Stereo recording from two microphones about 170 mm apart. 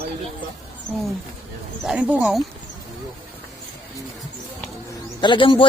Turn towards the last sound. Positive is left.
turn(degrees=30)  # may be behind; listen again after turning